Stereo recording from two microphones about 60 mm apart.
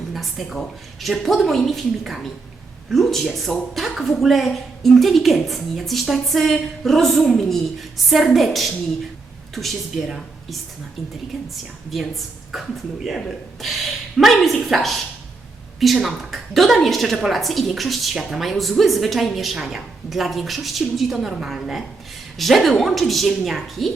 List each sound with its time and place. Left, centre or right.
0.1 s a woman's voice: centre